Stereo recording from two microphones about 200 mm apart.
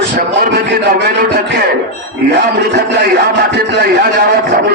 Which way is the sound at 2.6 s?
55° right (ahead or behind).